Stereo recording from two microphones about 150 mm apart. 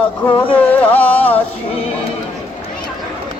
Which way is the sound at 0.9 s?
10° left (ahead or behind).